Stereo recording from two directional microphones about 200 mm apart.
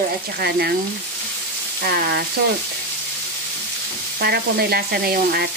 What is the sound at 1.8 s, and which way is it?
Speech, 50° right (ahead or behind).